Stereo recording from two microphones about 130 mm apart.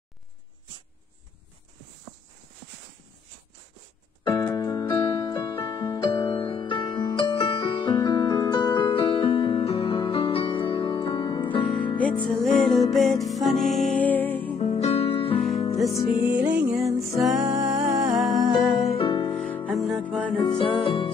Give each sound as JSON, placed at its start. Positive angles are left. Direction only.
{"t": 4.2, "sound": "keyboard", "side_deg": 35}
{"t": 4.6, "sound": "music", "side_deg": 30}
{"t": 5.9, "sound": "music", "side_deg": 40}
{"t": 12.0, "sound": "music", "side_deg": 5}
{"t": 14.0, "sound": "music", "side_deg": 15}
{"t": 14.6, "sound": "music", "side_deg": 55}
{"t": 16.4, "sound": "music", "side_deg": 0}
{"t": 18.9, "sound": "music", "side_deg": 40}
{"t": 19.3, "sound": "music", "side_deg": 10}
{"t": 19.7, "sound": "music", "side_deg": 0}
{"t": 20.4, "sound": "music", "side_deg": 40}